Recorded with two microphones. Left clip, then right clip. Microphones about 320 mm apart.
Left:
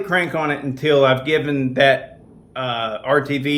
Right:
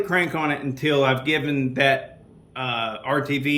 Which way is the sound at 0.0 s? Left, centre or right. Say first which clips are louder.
Left 3 dB; centre.